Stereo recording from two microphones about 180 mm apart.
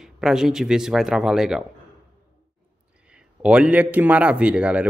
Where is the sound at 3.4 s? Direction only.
5° right (ahead or behind).